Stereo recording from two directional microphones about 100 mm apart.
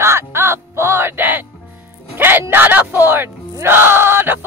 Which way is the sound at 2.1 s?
20° right (ahead or behind).